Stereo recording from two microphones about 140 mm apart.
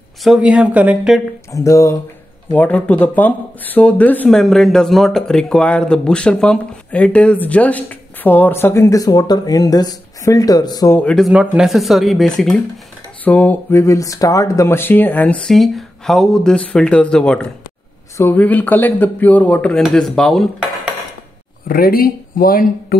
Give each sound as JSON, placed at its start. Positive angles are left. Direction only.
{"t": 0.2, "sound": "speech", "side_deg": -5}
{"t": 1.5, "sound": "speech", "side_deg": 25}
{"t": 2.5, "sound": "speech", "side_deg": 10}
{"t": 11.0, "sound": "speech", "side_deg": 10}
{"t": 11.2, "sound": "speech", "side_deg": -5}
{"t": 21.6, "sound": "speech", "side_deg": 90}